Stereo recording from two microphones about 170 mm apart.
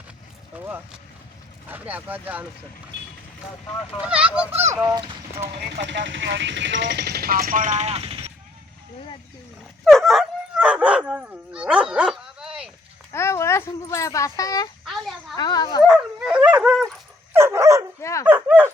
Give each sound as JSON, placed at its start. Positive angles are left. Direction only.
{"t": 1.6, "sound": "fowl", "side_deg": -10}
{"t": 4.0, "sound": "fowl", "side_deg": -5}
{"t": 5.5, "sound": "speech", "side_deg": -80}
{"t": 9.8, "sound": "dog", "side_deg": 0}
{"t": 13.1, "sound": "speech", "side_deg": 15}
{"t": 14.8, "sound": "a sound", "side_deg": 0}
{"t": 15.4, "sound": "speech", "side_deg": 25}
{"t": 15.8, "sound": "dog", "side_deg": 0}
{"t": 17.3, "sound": "dog", "side_deg": -15}
{"t": 18.0, "sound": "speech", "side_deg": 20}
{"t": 18.3, "sound": "bow-wow", "side_deg": -10}